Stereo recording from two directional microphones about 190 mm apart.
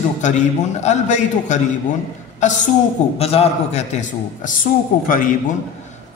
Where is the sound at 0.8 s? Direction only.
40° left (ahead or behind).